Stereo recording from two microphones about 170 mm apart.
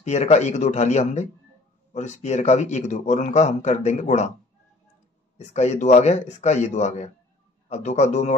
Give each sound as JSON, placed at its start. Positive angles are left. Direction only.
{"t": 0.0, "sound": "speech", "side_deg": 40}
{"t": 5.4, "sound": "a man's voice", "side_deg": 40}